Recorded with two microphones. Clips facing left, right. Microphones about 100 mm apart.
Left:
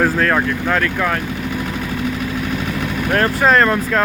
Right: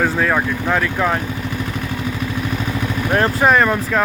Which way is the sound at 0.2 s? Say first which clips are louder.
Left 1 dB; 10° right (ahead or behind).